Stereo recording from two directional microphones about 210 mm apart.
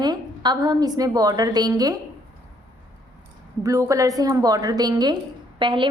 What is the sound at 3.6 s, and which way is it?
A woman's voice, 15° right (ahead or behind).